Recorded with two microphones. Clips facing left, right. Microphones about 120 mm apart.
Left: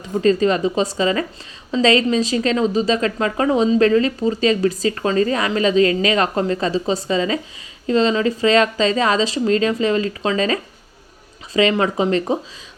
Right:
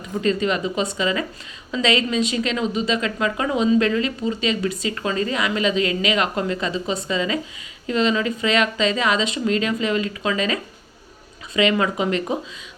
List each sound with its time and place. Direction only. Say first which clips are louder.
0.0 s a woman's voice: left 5 dB; 35° left (ahead or behind)